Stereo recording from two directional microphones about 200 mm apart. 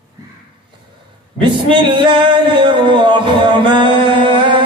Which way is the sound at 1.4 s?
25° right (ahead or behind).